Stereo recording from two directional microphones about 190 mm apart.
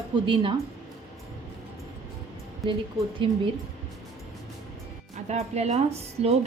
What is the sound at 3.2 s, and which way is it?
Speech, 25° right (ahead or behind).